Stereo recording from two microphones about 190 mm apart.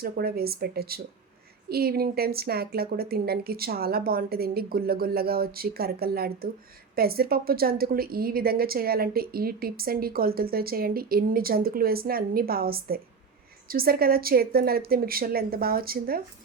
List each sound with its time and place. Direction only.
0.0 s a woman's voice: 55° right (ahead or behind)